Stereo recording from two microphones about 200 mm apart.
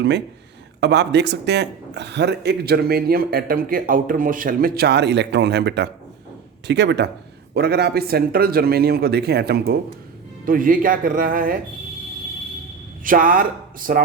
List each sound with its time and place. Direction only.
0.8 s speech: 60° right (ahead or behind)
10.4 s speech: 45° right (ahead or behind)
13.1 s speech: 45° right (ahead or behind)